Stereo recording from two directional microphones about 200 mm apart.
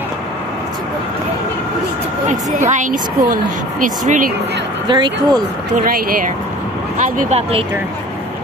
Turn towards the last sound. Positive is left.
turn(degrees=-40)  # may be behind; listen again after turning